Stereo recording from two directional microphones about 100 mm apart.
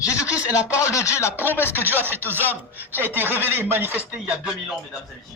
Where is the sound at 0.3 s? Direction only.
10° right (ahead or behind).